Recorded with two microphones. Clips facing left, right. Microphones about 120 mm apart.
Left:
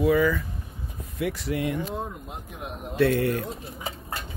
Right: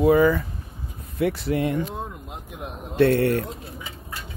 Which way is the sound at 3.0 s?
65° right (ahead or behind).